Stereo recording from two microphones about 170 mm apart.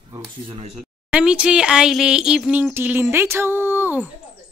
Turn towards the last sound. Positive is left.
turn(degrees=-10)  # may be behind; listen again after turning